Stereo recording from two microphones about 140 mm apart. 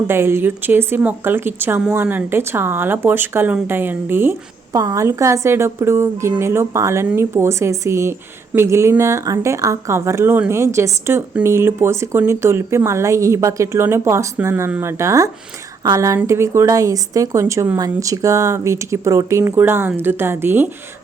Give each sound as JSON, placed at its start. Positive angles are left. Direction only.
{"t": 0.1, "sound": "speech", "side_deg": -15}